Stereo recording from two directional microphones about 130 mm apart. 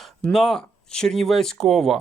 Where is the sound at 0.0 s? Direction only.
5° left (ahead or behind).